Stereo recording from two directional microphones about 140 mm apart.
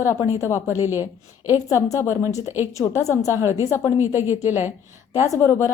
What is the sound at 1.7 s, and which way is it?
Speech, 25° left (ahead or behind).